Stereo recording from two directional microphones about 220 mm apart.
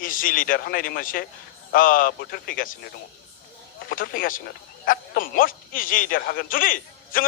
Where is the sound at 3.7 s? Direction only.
40° left (ahead or behind).